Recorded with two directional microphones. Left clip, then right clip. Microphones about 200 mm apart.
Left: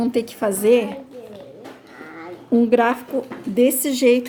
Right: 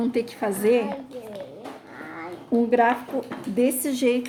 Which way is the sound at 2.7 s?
50° left (ahead or behind).